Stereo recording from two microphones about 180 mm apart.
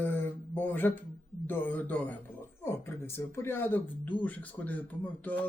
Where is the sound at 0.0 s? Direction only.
10° left (ahead or behind).